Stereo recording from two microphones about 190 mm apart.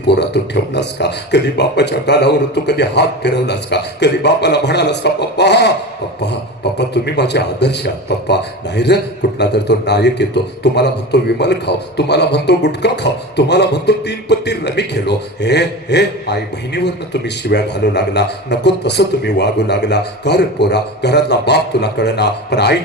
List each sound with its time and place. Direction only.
0.2 s a man's voice: 60° left (ahead or behind)
6.7 s a man's voice: 60° left (ahead or behind)